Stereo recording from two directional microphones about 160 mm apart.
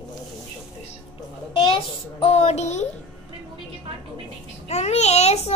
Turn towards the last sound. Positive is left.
turn(degrees=40)  # may be behind; listen again after turning